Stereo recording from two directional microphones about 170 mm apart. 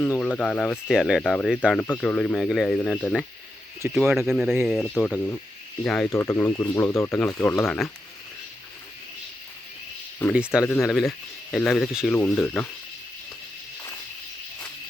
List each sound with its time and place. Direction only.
0.0 s speech: 5° left (ahead or behind)
1.8 s speech: 10° left (ahead or behind)
3.8 s speech: 10° right (ahead or behind); by 6.1 s 5° left (ahead or behind)
6.1 s speech: 20° left (ahead or behind)
10.3 s speech: 5° right (ahead or behind)
10.6 s speech: 15° left (ahead or behind)
10.8 s speech: centre (ahead or behind)
12.1 s speech: 10° left (ahead or behind)